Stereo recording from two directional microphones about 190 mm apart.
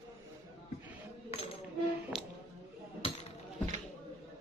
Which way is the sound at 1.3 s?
30° left (ahead or behind).